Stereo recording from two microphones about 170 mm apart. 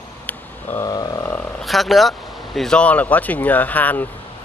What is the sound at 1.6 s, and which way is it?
Speech, centre (ahead or behind).